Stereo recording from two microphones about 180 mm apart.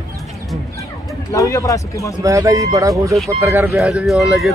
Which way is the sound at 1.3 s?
15° left (ahead or behind).